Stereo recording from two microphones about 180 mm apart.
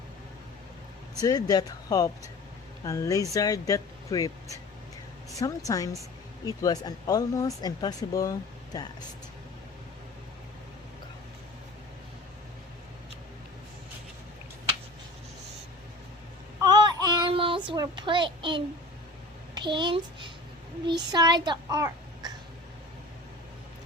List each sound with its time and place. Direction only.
1.2 s speech: 20° left (ahead or behind)
16.6 s child singing: 20° right (ahead or behind)
17.7 s a child's voice: 25° right (ahead or behind)